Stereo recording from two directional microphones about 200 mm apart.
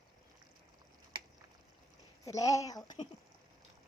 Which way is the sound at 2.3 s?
15° left (ahead or behind).